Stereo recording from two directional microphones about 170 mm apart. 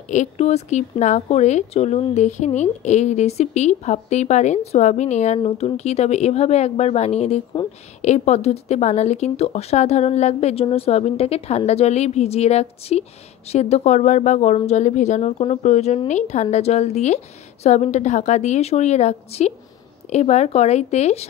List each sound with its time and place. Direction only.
0.1 s speech: 45° left (ahead or behind)